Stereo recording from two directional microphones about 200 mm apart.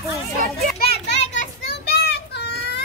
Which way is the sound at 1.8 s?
55° left (ahead or behind).